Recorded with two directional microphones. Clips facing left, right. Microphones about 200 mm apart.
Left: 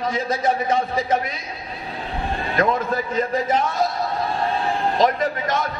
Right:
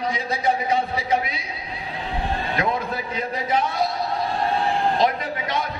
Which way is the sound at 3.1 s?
45° left (ahead or behind).